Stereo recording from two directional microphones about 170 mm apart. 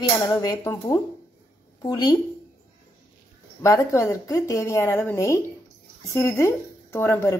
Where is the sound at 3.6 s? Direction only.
20° left (ahead or behind).